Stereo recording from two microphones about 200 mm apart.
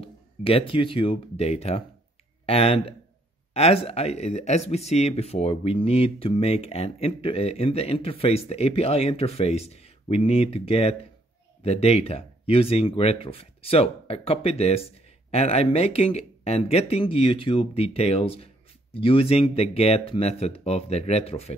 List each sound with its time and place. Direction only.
0.0 s speech: 30° left (ahead or behind)